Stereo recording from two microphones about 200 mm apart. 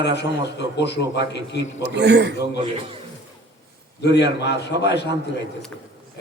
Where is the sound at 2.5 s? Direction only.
30° right (ahead or behind).